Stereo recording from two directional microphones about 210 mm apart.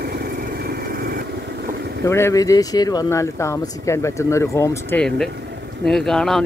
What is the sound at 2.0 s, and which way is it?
Speech, 10° left (ahead or behind).